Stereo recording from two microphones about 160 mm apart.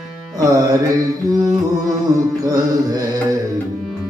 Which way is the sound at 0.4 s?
20° right (ahead or behind).